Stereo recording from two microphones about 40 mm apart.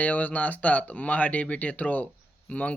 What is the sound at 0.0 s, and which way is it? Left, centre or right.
Speech, left.